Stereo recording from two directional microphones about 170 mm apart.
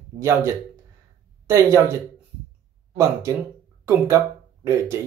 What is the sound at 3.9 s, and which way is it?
Speech, 15° right (ahead or behind).